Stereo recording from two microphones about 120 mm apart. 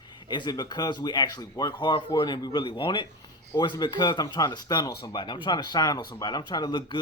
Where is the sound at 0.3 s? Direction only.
40° left (ahead or behind).